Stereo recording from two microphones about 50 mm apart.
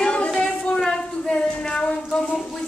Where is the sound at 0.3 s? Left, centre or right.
Centre.